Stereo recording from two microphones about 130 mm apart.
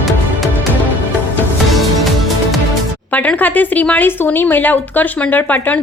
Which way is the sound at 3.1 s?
10° left (ahead or behind).